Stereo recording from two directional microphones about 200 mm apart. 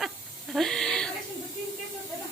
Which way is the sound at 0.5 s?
Centre (ahead or behind).